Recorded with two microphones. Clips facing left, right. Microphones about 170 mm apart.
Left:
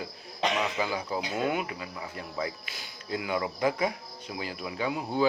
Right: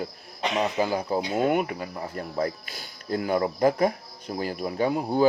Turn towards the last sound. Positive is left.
turn(degrees=-45)  # may be behind; listen again after turning